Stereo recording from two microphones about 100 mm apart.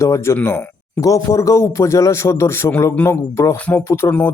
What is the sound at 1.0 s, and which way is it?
A man's voice, 35° left (ahead or behind).